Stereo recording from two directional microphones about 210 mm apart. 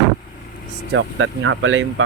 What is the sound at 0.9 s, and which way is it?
Speech, 65° right (ahead or behind).